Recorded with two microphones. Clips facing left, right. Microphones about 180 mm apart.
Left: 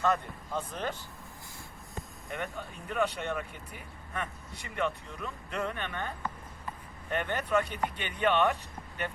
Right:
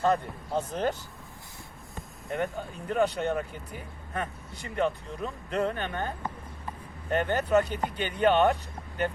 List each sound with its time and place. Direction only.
0.0 s speech: 35° right (ahead or behind)
2.3 s speech: 35° right (ahead or behind)